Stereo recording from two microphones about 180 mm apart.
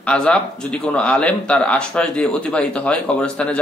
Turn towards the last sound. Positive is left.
turn(degrees=5)  # may be behind; listen again after turning